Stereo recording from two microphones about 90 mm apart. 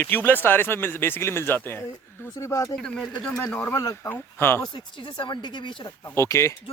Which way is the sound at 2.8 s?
5° left (ahead or behind).